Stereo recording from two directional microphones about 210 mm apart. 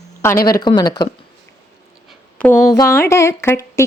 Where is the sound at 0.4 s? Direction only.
20° left (ahead or behind).